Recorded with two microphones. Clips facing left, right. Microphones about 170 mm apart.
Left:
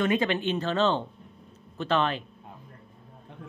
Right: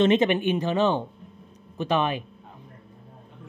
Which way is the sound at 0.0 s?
20° right (ahead or behind).